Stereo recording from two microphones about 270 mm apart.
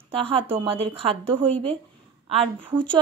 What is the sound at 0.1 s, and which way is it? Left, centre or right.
Speech, centre.